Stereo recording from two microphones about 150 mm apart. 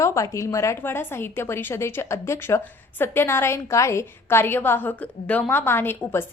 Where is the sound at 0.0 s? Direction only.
20° left (ahead or behind).